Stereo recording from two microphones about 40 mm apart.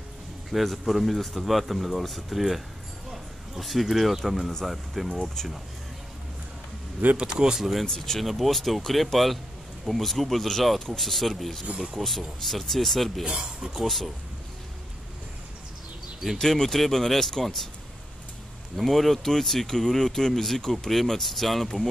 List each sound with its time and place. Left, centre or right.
0.5 s speech: centre
7.2 s speech: centre
7.8 s speech: centre
8.2 s speech: centre
13.2 s speech: centre
13.8 s speech: centre
16.3 s speech: centre
18.8 s speech: centre